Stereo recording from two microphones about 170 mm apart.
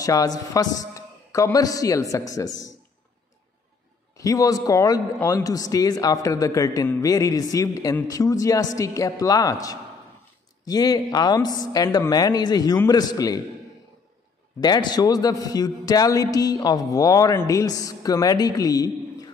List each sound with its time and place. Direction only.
0.0 s a man's voice: 20° left (ahead or behind)
4.2 s a man's voice: 20° left (ahead or behind)
14.6 s a man's voice: 25° left (ahead or behind)